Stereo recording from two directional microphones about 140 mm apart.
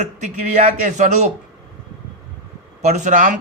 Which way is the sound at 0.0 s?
65° right (ahead or behind).